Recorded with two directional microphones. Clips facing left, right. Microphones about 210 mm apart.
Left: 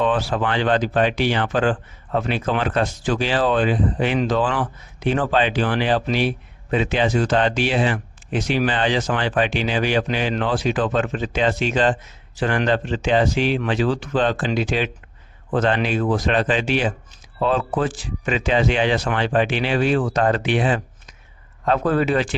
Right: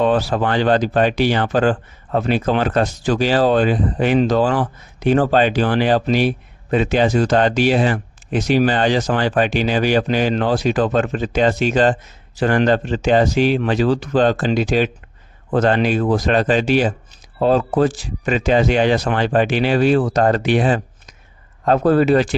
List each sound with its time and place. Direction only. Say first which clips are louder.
0.0 s speech: right 4 dB; 40° right (ahead or behind)